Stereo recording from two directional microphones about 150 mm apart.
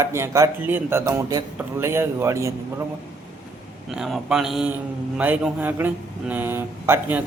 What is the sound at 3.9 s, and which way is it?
A man's voice, 5° right (ahead or behind).